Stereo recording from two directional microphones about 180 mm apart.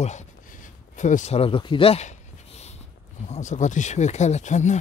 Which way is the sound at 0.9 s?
40° left (ahead or behind).